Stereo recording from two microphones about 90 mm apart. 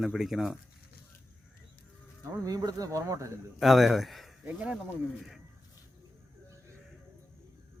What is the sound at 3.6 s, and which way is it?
Speech, centre (ahead or behind).